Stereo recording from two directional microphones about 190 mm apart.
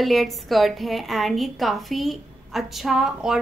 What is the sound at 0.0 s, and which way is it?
A woman's voice, centre (ahead or behind).